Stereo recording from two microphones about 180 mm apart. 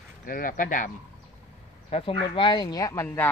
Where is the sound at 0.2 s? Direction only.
50° left (ahead or behind).